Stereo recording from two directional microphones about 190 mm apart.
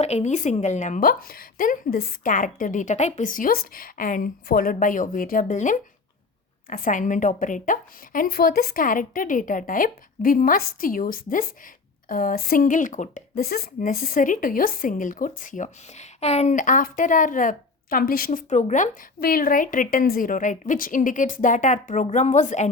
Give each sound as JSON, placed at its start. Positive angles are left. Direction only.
{"t": 0.0, "sound": "speech", "side_deg": 35}